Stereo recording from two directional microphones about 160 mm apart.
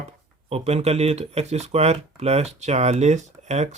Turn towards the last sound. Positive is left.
turn(degrees=-45)  # may be behind; listen again after turning